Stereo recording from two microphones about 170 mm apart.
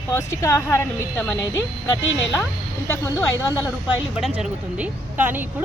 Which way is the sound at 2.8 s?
15° left (ahead or behind).